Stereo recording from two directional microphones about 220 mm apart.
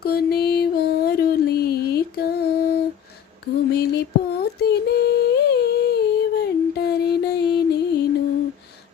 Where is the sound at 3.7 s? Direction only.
45° left (ahead or behind).